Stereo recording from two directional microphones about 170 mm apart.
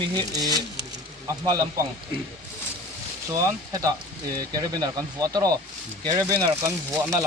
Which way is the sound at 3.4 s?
20° right (ahead or behind).